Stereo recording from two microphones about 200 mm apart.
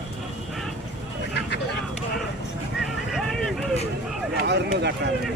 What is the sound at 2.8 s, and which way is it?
Vehicle, centre (ahead or behind).